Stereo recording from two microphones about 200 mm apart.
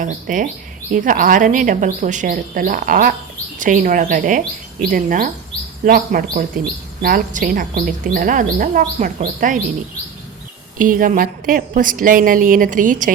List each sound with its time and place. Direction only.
0.0 s a woman's voice: 40° right (ahead or behind)
10.8 s a woman's voice: 45° right (ahead or behind)